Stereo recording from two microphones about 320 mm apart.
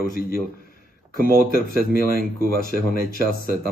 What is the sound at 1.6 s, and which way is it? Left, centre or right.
A man's voice, left.